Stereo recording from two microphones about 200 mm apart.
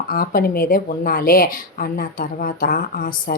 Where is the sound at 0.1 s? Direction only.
45° left (ahead or behind).